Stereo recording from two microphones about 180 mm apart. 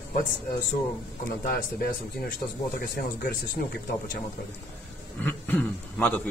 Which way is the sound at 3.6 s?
55° left (ahead or behind).